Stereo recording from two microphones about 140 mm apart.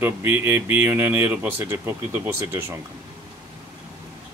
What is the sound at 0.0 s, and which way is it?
Speech, 15° right (ahead or behind).